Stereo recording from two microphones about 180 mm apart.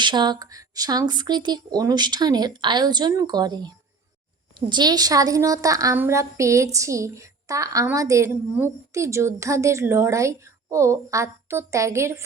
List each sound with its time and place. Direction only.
0.0 s speech: 25° right (ahead or behind)
4.7 s a woman's voice: 25° right (ahead or behind)